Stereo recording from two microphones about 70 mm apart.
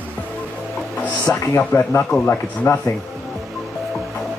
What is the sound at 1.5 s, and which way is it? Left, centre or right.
Speech, left.